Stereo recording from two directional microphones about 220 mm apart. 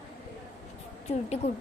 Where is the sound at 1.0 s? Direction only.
30° left (ahead or behind).